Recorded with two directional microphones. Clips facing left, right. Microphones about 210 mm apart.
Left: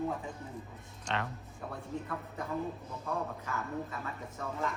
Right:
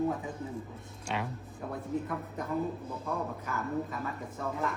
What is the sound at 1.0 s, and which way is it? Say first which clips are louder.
Speech: right 1 dB; 10° right (ahead or behind).